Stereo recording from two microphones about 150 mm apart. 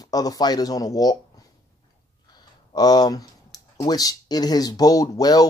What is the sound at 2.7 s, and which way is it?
Speech, 25° left (ahead or behind).